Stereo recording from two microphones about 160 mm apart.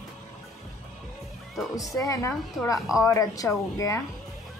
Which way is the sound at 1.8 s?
20° left (ahead or behind).